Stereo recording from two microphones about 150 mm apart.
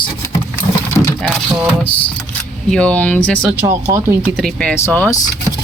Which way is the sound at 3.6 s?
15° right (ahead or behind).